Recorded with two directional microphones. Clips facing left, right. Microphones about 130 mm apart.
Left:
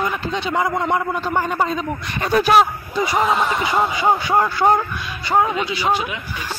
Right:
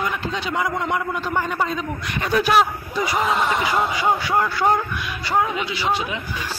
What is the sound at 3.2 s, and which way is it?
Speech, centre (ahead or behind).